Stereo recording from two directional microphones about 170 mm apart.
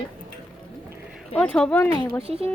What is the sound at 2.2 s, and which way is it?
Speech, 35° right (ahead or behind).